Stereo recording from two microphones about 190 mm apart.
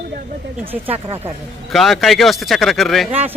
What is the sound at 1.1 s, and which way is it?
Speech, 10° right (ahead or behind).